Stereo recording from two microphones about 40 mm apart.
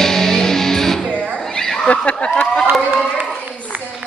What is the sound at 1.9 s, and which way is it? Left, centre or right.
Speech, left.